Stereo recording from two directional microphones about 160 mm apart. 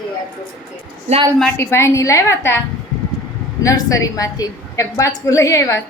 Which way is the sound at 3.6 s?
20° left (ahead or behind).